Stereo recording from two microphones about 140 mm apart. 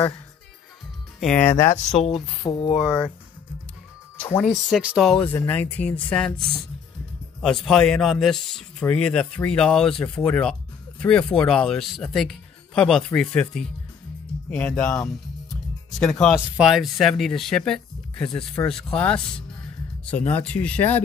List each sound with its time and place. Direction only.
1.2 s speech: 10° left (ahead or behind)
2.0 s speech: 40° left (ahead or behind)
2.8 s speech: 10° left (ahead or behind)
4.2 s speech: 10° left (ahead or behind)
4.5 s speech: centre (ahead or behind)
5.3 s speech: 15° left (ahead or behind)
7.4 s speech: centre (ahead or behind)
16.1 s speech: 5° left (ahead or behind)